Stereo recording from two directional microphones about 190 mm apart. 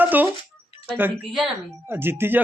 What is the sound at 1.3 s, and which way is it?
Speech, 5° right (ahead or behind).